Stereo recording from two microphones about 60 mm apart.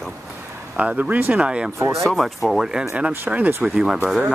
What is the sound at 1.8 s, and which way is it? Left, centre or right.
Speech, right.